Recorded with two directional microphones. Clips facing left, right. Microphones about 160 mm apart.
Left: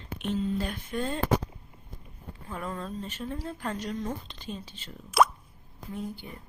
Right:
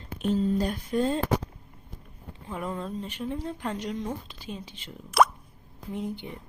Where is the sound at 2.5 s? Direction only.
15° right (ahead or behind).